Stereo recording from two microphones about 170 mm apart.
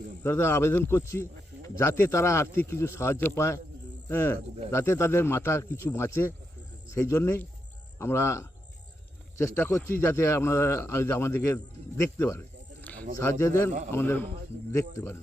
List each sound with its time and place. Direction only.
0.2 s speech: 15° left (ahead or behind)